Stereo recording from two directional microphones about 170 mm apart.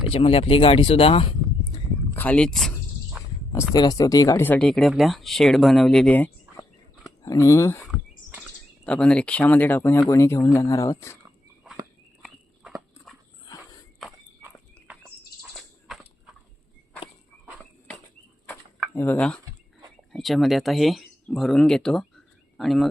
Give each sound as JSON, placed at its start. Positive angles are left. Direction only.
{"t": 0.1, "sound": "speech", "side_deg": 35}
{"t": 2.1, "sound": "speech", "side_deg": 10}
{"t": 3.5, "sound": "speech", "side_deg": 15}
{"t": 6.6, "sound": "a sound", "side_deg": 20}
{"t": 7.9, "sound": "a sound", "side_deg": 0}
{"t": 10.1, "sound": "speech", "side_deg": 15}
{"t": 12.2, "sound": "dog", "side_deg": 0}
{"t": 18.4, "sound": "a sound", "side_deg": 10}
{"t": 20.1, "sound": "speech", "side_deg": 0}